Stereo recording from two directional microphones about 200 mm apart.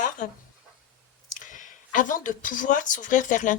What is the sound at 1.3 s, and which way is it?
Speech, 40° left (ahead or behind).